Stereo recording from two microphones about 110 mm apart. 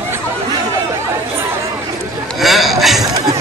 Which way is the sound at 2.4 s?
Centre (ahead or behind).